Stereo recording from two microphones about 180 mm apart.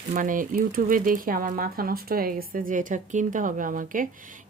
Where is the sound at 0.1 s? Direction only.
45° right (ahead or behind).